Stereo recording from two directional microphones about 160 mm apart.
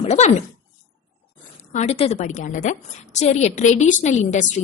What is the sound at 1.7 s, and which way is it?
A woman's voice, 45° left (ahead or behind).